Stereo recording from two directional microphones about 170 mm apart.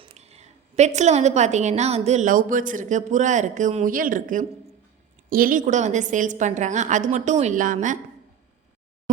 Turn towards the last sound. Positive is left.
turn(degrees=-50)  # may be behind; listen again after turning